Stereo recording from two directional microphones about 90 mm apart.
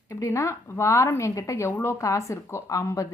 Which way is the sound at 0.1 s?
35° left (ahead or behind).